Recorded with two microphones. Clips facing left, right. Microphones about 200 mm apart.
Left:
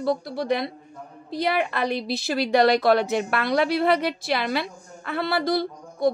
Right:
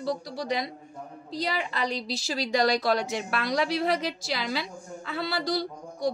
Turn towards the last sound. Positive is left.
turn(degrees=55)  # may be behind; listen again after turning